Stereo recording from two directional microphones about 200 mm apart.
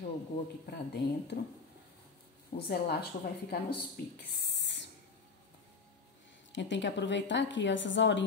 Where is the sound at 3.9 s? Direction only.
55° left (ahead or behind).